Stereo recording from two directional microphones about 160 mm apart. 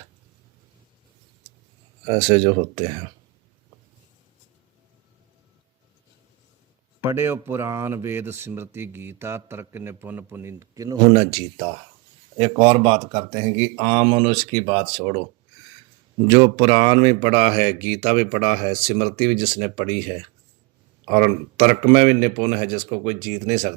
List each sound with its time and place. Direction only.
2.0 s speech: 35° right (ahead or behind)
7.0 s a man's voice: 15° right (ahead or behind); by 15.2 s 40° right (ahead or behind)
16.2 s a man's voice: 30° right (ahead or behind)